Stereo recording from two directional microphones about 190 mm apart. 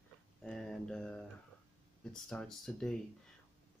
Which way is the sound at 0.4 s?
Centre (ahead or behind).